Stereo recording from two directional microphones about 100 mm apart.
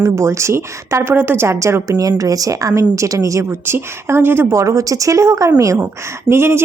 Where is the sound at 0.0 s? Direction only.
30° right (ahead or behind).